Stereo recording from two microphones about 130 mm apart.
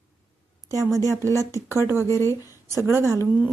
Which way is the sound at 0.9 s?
25° right (ahead or behind).